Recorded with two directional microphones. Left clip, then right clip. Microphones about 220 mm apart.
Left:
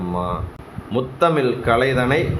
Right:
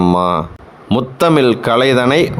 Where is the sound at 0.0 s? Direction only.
55° right (ahead or behind).